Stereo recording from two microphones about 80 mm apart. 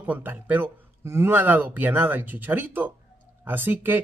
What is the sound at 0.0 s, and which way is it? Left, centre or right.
Speech, right.